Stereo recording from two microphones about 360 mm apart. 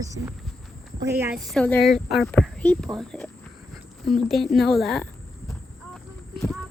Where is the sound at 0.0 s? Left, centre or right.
Centre.